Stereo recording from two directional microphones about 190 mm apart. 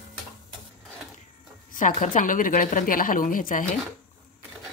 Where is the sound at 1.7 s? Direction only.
40° left (ahead or behind).